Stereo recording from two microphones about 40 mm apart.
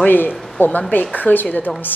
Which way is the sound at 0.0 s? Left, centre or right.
Left.